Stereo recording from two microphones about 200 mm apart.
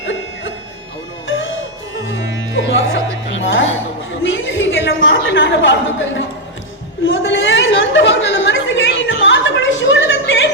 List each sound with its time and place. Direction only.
0.0 s music: 70° left (ahead or behind)
2.0 s music: 70° left (ahead or behind)
4.2 s a sound: 65° left (ahead or behind)
7.1 s chatter: 70° left (ahead or behind)